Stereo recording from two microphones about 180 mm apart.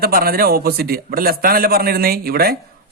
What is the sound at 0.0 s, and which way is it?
A man's voice, 55° right (ahead or behind).